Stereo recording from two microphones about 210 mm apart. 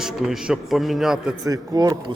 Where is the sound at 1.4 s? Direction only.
15° right (ahead or behind).